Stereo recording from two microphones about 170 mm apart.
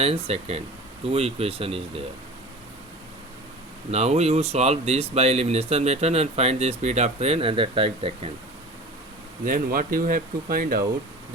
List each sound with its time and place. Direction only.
0.0 s speech: 35° right (ahead or behind)
3.9 s speech: 40° right (ahead or behind)
9.4 s speech: 55° right (ahead or behind)